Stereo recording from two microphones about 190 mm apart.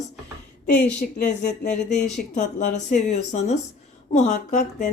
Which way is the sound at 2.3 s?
40° left (ahead or behind).